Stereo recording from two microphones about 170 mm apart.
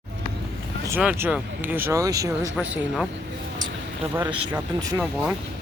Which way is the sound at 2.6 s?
10° right (ahead or behind).